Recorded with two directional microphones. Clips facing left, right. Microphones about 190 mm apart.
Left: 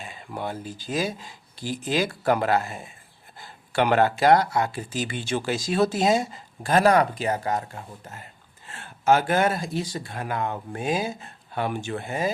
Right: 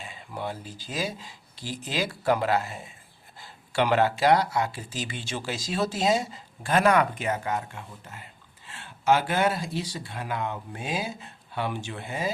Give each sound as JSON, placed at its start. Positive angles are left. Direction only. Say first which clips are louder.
{"t": 0.0, "sound": "speech", "louder": "left 2 dB", "side_deg": 50}